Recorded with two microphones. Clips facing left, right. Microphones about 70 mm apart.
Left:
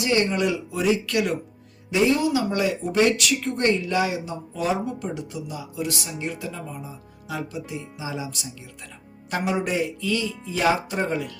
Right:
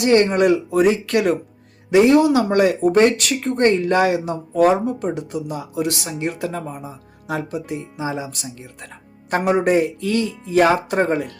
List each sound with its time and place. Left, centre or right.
0.0 s speech: right
1.9 s speech: right